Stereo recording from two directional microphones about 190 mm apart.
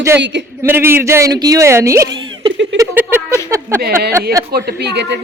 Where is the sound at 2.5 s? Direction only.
75° right (ahead or behind).